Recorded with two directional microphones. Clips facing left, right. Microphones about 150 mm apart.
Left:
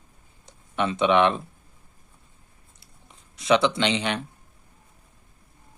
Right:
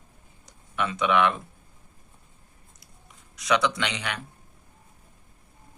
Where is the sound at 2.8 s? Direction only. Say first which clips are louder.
Left 1 dB; 25° left (ahead or behind).